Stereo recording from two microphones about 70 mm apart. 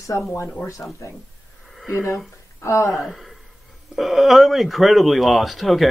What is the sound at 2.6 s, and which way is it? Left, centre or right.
Speech, left.